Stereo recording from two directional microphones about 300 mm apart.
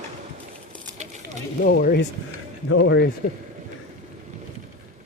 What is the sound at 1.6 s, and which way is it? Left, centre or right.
Speech, left.